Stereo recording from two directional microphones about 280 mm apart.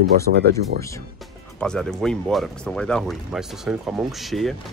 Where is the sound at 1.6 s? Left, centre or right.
Centre.